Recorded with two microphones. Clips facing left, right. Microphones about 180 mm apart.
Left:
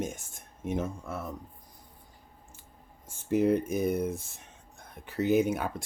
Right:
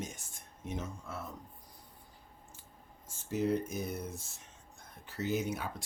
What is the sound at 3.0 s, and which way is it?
Speech, 55° left (ahead or behind).